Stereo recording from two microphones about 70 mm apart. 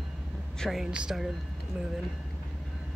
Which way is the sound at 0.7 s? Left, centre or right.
Centre.